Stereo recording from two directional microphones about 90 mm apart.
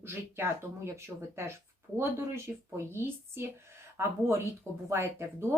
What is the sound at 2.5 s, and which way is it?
Speech, 20° right (ahead or behind).